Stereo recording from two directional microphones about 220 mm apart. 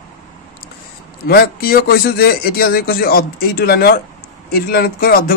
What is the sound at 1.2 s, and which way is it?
A man's voice, 45° left (ahead or behind).